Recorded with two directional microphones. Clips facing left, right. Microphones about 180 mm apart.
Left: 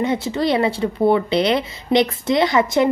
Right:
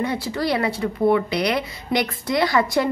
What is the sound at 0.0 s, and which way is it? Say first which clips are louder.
Speech: left 4 dB; 20° left (ahead or behind).